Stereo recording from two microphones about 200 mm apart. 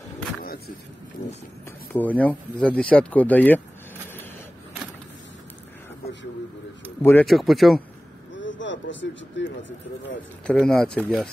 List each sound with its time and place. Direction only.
1.9 s speech: 10° left (ahead or behind)
7.0 s speech: 10° left (ahead or behind)
7.2 s speech: centre (ahead or behind)
8.4 s vehicle: 65° left (ahead or behind)
9.4 s speech: 65° left (ahead or behind)
10.4 s speech: 5° left (ahead or behind)